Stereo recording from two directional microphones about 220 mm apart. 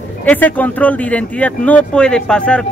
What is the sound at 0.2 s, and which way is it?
Speech, 5° left (ahead or behind).